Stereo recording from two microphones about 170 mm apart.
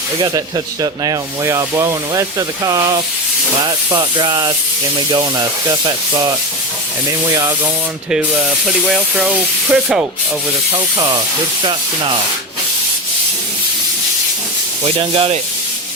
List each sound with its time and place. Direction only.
0.2 s speech: 25° right (ahead or behind)
7.3 s speech: 20° right (ahead or behind)
8.1 s speech: 5° right (ahead or behind)
10.9 s speech: 25° right (ahead or behind)
14.8 s speech: 30° right (ahead or behind)